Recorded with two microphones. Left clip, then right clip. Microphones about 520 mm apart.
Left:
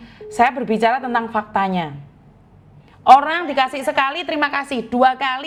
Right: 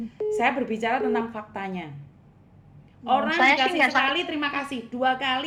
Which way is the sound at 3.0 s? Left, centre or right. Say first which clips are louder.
Left 8 dB; left.